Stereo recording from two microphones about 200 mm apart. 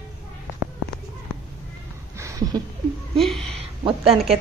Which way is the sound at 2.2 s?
15° right (ahead or behind).